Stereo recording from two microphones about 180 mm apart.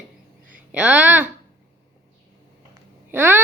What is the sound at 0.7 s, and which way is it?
Speech, 10° right (ahead or behind).